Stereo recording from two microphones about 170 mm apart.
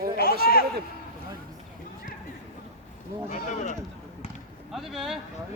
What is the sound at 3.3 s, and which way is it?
Speech, 45° left (ahead or behind).